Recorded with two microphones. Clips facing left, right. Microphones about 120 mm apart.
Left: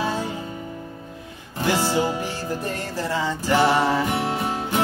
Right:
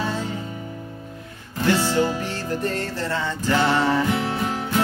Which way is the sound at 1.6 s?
15° left (ahead or behind).